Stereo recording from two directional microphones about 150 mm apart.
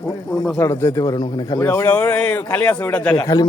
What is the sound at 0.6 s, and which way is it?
Speech, 15° left (ahead or behind).